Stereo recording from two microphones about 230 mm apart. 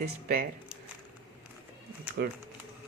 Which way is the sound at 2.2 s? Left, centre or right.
Right.